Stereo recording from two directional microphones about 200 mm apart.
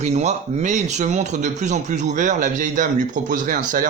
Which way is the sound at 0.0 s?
35° right (ahead or behind).